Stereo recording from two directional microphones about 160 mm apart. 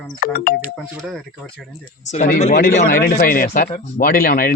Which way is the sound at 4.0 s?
70° left (ahead or behind).